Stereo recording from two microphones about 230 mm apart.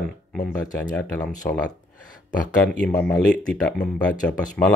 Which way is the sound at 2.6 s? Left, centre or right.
Centre.